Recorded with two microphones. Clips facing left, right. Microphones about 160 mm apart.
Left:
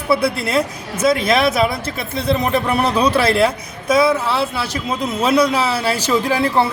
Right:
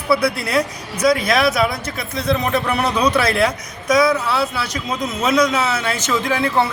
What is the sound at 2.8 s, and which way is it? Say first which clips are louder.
A man's voice: left 2 dB; 30° left (ahead or behind).